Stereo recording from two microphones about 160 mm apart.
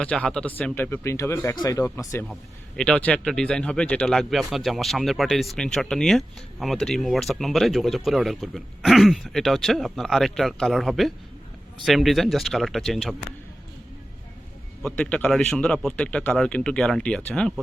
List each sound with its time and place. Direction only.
0.0 s speech: 5° left (ahead or behind)
2.7 s speech: 5° left (ahead or behind)
14.8 s speech: 5° left (ahead or behind)